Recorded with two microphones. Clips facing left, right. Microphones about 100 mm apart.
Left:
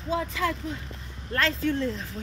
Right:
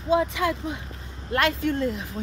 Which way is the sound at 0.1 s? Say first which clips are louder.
Right 5 dB; 20° right (ahead or behind).